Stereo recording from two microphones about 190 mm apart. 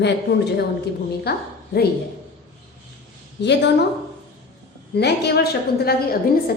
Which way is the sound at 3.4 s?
65° left (ahead or behind).